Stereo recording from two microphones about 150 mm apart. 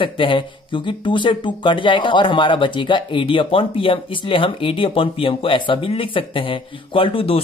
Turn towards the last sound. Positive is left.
turn(degrees=40)  # may be behind; listen again after turning